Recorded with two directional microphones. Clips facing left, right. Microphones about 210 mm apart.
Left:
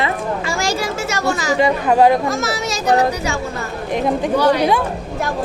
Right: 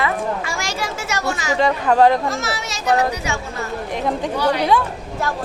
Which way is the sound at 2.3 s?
40° left (ahead or behind).